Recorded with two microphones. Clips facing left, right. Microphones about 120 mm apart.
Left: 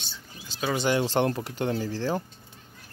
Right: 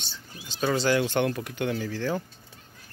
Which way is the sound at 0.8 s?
30° left (ahead or behind).